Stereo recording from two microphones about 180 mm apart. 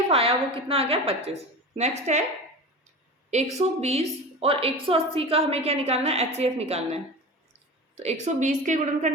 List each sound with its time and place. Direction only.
0.1 s a woman's voice: 30° right (ahead or behind)
3.2 s a woman's voice: 40° right (ahead or behind)